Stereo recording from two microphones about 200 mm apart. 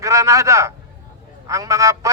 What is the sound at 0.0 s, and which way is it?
A man's voice, 15° right (ahead or behind).